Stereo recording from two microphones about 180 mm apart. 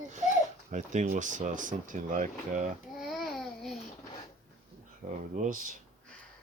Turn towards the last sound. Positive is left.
turn(degrees=-45)  # may be behind; listen again after turning